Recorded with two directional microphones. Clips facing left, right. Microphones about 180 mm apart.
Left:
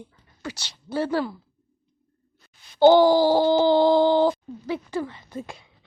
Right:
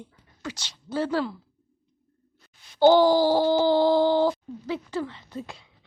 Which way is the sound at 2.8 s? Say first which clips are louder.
Left 2 dB; 15° left (ahead or behind).